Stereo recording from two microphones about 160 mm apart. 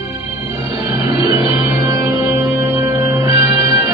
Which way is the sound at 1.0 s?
20° right (ahead or behind).